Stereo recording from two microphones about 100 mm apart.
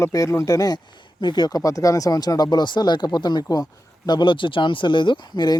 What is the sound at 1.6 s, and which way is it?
Speech, 35° left (ahead or behind).